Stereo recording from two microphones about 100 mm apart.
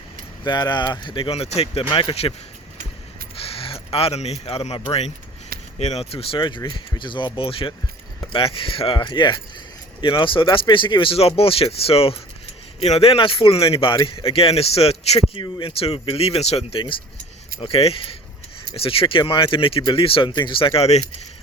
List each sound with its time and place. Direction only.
0.4 s speech: 50° left (ahead or behind); by 2.3 s 65° left (ahead or behind)
3.4 s speech: 70° left (ahead or behind)
6.4 s speech: 50° left (ahead or behind); by 15.2 s 90° left
15.4 s speech: 60° left (ahead or behind); by 16.8 s 85° left
17.6 s speech: 70° left (ahead or behind)